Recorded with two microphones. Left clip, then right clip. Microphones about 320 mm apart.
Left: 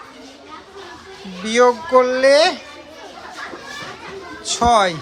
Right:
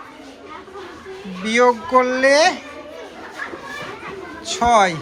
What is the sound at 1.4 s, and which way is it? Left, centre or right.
Speech, centre.